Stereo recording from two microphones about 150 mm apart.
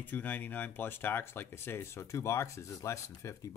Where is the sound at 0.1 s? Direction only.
10° left (ahead or behind).